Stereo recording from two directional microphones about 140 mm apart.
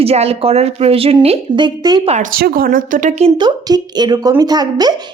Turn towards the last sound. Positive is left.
turn(degrees=-30)  # may be behind; listen again after turning